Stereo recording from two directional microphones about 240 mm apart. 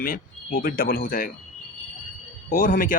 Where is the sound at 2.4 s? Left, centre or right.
Left.